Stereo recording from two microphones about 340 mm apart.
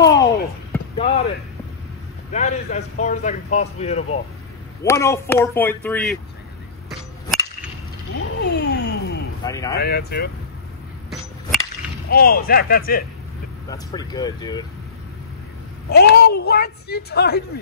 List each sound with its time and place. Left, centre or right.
0.0 s a sound: centre
2.3 s a man's voice: left
4.8 s speech: centre
8.2 s music: left
9.4 s speech: centre
9.8 s a man's voice: left
12.1 s a man's voice: left
13.7 s speech: centre
15.9 s a man's voice: left